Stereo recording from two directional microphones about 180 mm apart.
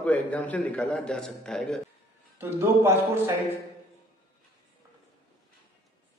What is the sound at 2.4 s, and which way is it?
Speech, 10° right (ahead or behind).